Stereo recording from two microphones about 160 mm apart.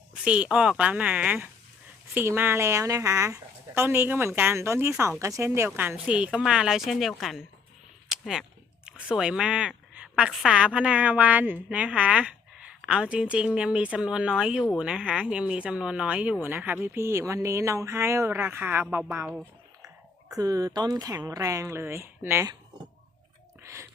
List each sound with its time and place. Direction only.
0.1 s a woman's voice: 5° right (ahead or behind)
8.1 s a sound: centre (ahead or behind)
8.9 s a woman's voice: 5° right (ahead or behind)
19.2 s speech: 5° right (ahead or behind)
20.3 s speech: 20° right (ahead or behind)
23.6 s a sound: 15° right (ahead or behind)